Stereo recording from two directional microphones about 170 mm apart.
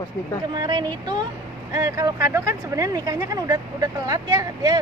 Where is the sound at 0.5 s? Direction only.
25° right (ahead or behind).